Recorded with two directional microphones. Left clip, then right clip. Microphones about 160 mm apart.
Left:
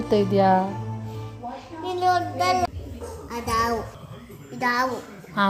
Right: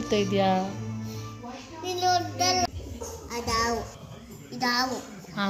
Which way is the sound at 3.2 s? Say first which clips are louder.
Left 3 dB; 35° left (ahead or behind).